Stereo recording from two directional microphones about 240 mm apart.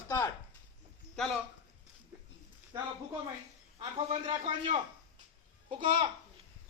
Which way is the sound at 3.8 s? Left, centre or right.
Right.